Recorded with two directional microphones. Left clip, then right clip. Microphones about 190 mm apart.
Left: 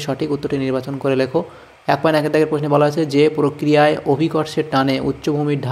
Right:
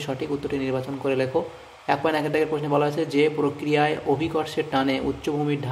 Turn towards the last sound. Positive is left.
turn(degrees=25)  # may be behind; listen again after turning